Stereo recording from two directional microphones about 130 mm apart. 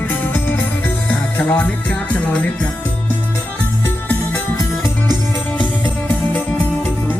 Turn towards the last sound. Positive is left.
turn(degrees=15)  # may be behind; listen again after turning